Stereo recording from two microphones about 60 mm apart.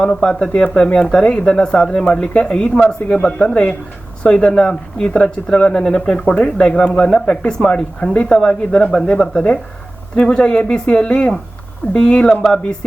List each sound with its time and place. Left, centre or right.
0.0 s speech: centre